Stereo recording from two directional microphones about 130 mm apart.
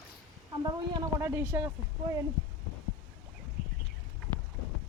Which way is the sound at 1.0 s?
20° right (ahead or behind).